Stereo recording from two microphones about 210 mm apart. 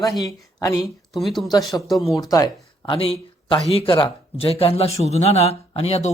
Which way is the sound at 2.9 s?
25° left (ahead or behind).